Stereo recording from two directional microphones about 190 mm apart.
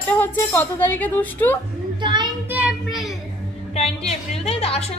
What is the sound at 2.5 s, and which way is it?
Child singing, 5° right (ahead or behind).